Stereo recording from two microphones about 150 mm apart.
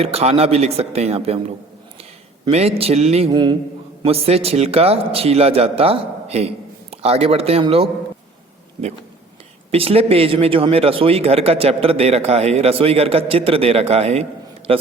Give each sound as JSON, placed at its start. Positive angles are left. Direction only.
{"t": 0.0, "sound": "a man's voice", "side_deg": -40}
{"t": 2.5, "sound": "a man's voice", "side_deg": -45}
{"t": 3.2, "sound": "mantra", "side_deg": -30}
{"t": 4.0, "sound": "speech", "side_deg": -40}
{"t": 9.7, "sound": "speech", "side_deg": -40}